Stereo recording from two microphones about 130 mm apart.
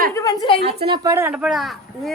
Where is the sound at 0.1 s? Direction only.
30° left (ahead or behind).